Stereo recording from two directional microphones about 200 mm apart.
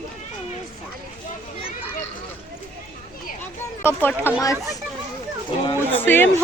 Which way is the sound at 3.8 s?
10° left (ahead or behind).